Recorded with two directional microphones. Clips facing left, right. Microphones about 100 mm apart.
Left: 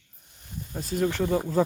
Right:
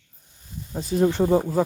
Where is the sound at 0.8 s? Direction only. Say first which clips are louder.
Right 6 dB; 20° right (ahead or behind).